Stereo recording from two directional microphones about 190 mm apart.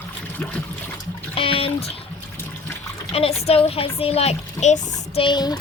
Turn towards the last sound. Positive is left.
turn(degrees=20)  # may be behind; listen again after turning